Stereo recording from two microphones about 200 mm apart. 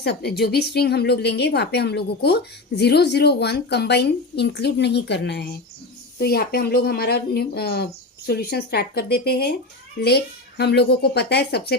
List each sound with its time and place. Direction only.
0.0 s speech: 55° left (ahead or behind)
10.6 s speech: 55° left (ahead or behind)